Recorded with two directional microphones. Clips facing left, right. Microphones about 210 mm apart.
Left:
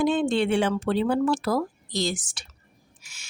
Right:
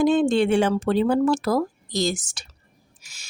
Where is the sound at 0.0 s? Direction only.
45° right (ahead or behind).